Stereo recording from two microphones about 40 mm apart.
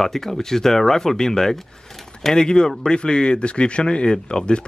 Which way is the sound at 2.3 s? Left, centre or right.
Centre.